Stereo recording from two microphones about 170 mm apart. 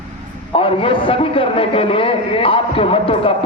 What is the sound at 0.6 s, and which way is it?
A man's voice, 30° left (ahead or behind).